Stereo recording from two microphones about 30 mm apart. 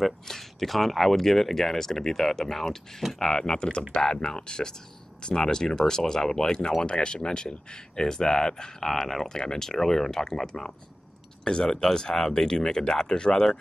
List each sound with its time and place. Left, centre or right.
0.0 s speech: centre
3.2 s speech: left
6.8 s speech: left
8.8 s speech: centre
11.6 s speech: centre